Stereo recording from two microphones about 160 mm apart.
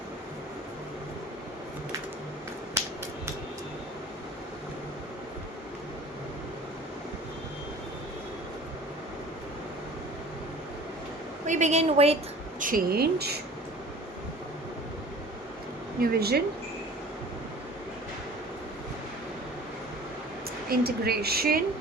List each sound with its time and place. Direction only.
11.4 s a woman's voice: 45° right (ahead or behind)
12.5 s speech: 60° right (ahead or behind); by 13.4 s 85° right
16.0 s speech: 80° right
20.7 s speech: 75° right (ahead or behind)